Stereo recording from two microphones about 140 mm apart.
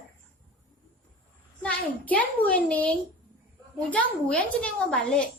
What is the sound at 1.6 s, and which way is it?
A woman's voice, 10° left (ahead or behind).